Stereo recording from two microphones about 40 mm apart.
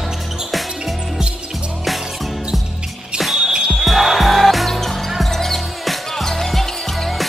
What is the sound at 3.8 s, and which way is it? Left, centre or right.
Music, centre.